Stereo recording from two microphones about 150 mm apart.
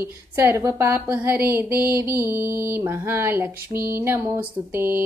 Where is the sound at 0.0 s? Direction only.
15° right (ahead or behind).